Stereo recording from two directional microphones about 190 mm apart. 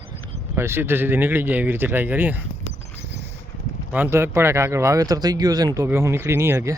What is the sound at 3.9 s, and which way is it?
Speech, 10° right (ahead or behind).